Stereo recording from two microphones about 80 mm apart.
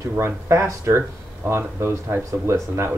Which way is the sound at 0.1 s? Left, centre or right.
Right.